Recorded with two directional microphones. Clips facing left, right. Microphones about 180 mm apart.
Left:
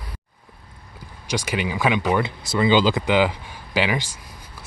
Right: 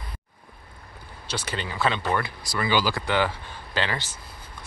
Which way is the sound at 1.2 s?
10° left (ahead or behind).